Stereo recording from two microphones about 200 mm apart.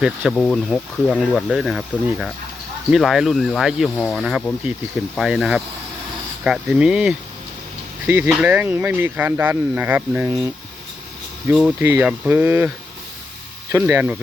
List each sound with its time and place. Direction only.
0.0 s speech: centre (ahead or behind)